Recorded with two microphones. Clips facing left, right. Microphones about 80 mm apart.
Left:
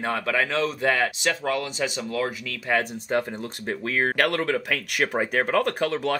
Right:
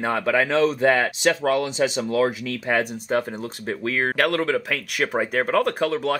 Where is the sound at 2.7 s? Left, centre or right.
Centre.